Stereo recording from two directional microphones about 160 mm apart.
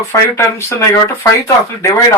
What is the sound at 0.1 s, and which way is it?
Speech, 20° left (ahead or behind).